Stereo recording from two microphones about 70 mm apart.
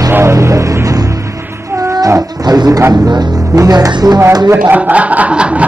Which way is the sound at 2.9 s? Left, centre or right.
Right.